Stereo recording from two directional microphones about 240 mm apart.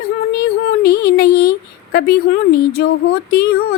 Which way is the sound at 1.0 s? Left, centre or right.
Left.